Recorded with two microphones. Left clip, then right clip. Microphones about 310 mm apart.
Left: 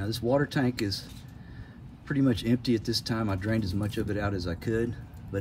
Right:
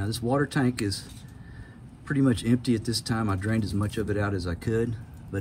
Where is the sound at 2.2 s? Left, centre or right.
Centre.